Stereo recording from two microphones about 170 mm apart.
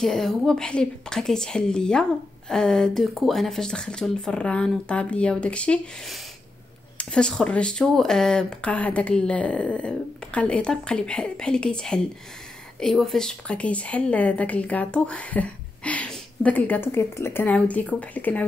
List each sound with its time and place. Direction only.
0.0 s a woman's voice: centre (ahead or behind)